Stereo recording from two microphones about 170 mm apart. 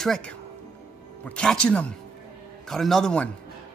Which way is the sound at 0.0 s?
Centre (ahead or behind).